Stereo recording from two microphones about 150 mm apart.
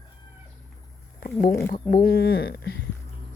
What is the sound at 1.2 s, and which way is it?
Speech, 80° left.